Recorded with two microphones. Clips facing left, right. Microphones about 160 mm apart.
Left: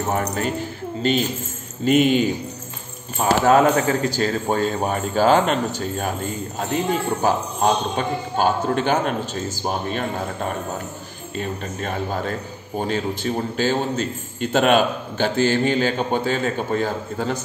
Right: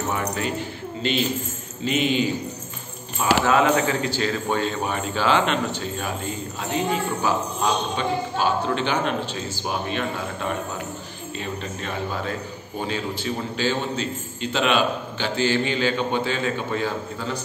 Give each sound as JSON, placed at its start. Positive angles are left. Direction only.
{"t": 0.1, "sound": "a man's voice", "side_deg": 45}
{"t": 3.4, "sound": "a man's voice", "side_deg": 40}